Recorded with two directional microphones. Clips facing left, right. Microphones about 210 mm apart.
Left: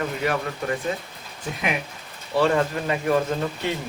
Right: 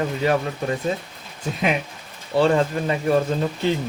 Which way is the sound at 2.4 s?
30° right (ahead or behind).